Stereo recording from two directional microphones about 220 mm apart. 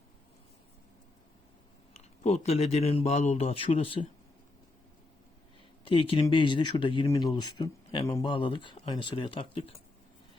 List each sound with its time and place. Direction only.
1.9 s speech: 30° left (ahead or behind)
5.8 s speech: 25° left (ahead or behind)